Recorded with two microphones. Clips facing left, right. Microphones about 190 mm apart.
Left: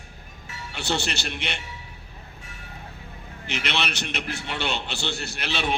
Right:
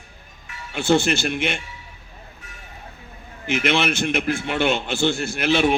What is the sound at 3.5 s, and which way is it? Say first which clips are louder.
A man's voice: right 8 dB; 50° right (ahead or behind).